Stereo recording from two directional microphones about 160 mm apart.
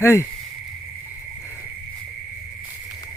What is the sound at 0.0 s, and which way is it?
Speech, 20° left (ahead or behind).